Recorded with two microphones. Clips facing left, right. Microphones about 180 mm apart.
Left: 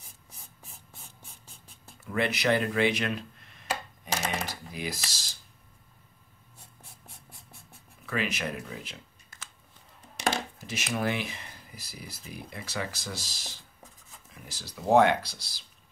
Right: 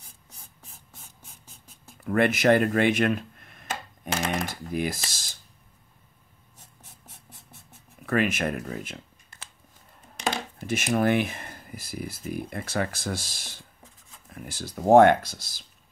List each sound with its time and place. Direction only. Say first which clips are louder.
2.0 s a sound: right 6 dB; 50° right (ahead or behind)
4.5 s speech: right 7 dB; 50° right (ahead or behind)
8.0 s speech: right 7 dB; 50° right (ahead or behind)
10.7 s speech: right 8 dB; 50° right (ahead or behind)